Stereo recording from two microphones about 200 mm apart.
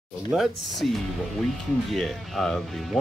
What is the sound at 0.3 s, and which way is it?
Speech, centre (ahead or behind).